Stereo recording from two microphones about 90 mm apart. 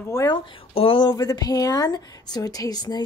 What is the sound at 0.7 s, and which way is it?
Speech, 85° left.